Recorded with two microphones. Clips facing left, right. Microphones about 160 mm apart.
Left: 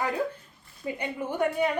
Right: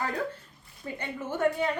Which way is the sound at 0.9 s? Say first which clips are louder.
Left 2 dB; 15° left (ahead or behind).